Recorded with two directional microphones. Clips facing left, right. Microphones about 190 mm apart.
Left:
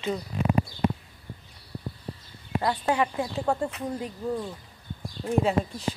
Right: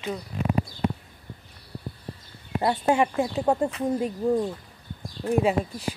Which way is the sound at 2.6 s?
25° right (ahead or behind).